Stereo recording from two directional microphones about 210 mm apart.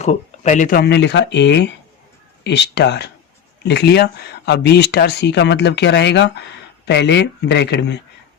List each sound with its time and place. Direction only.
0.0 s a man's voice: 35° left (ahead or behind); by 8.0 s 55° left (ahead or behind)